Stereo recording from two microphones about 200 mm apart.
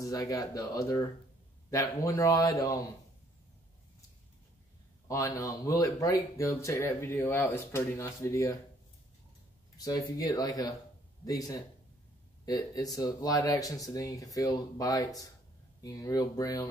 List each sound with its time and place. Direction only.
0.0 s speech: 15° left (ahead or behind)
5.0 s speech: 15° left (ahead or behind)
9.8 s speech: 15° left (ahead or behind)